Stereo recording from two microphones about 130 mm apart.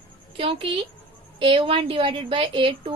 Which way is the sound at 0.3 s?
45° right (ahead or behind).